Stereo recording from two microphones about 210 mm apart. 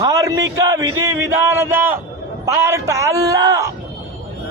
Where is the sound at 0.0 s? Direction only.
15° right (ahead or behind).